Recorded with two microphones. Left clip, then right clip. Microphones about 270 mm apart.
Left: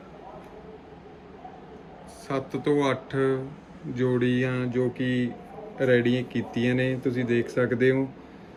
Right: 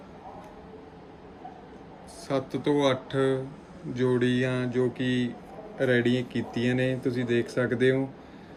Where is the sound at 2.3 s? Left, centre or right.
Centre.